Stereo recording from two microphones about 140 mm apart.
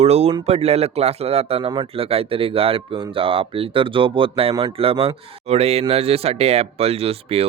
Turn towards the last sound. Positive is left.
turn(degrees=-45)  # may be behind; listen again after turning